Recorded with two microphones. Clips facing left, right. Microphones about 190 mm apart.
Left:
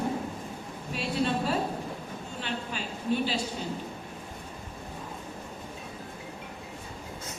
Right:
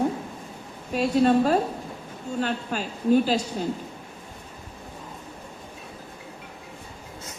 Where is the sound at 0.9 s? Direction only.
45° right (ahead or behind).